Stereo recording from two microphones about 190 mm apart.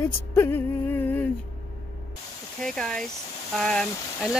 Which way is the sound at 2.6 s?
5° left (ahead or behind).